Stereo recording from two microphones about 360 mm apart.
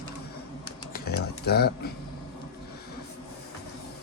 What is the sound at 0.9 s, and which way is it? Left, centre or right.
Typing, left.